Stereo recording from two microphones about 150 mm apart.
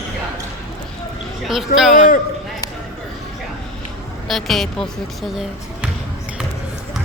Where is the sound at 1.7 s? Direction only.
75° left (ahead or behind).